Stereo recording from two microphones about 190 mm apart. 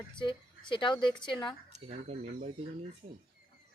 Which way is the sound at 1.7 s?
35° right (ahead or behind).